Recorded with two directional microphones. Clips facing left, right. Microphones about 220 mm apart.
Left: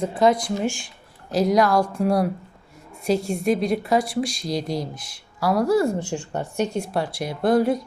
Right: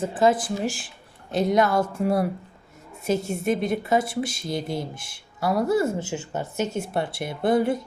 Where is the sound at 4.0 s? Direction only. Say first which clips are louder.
Left 2 dB; 25° right (ahead or behind).